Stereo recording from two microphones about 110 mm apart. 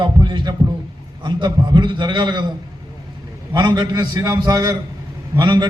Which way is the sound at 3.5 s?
40° right (ahead or behind).